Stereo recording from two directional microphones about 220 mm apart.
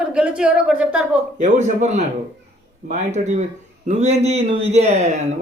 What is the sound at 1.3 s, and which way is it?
A man's voice, 30° right (ahead or behind).